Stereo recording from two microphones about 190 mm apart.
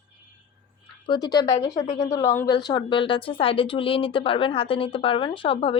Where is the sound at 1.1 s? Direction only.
20° left (ahead or behind).